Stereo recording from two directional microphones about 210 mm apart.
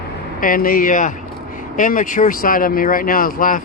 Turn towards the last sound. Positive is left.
turn(degrees=40)  # may be behind; listen again after turning